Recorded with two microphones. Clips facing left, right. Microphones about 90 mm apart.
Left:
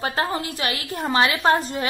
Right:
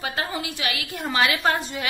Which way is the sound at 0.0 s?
40° left (ahead or behind).